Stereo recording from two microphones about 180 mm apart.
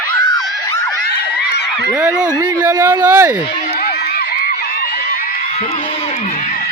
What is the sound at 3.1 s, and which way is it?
Speech, 10° right (ahead or behind).